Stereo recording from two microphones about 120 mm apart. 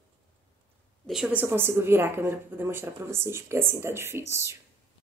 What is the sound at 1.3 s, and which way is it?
Speech, 20° right (ahead or behind).